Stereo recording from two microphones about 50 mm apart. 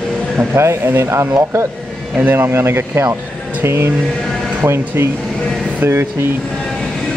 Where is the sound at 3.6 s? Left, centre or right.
Right.